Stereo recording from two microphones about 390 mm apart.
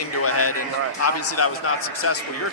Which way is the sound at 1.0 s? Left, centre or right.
Left.